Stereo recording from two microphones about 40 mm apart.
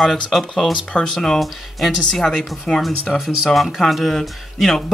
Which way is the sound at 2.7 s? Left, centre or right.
Left.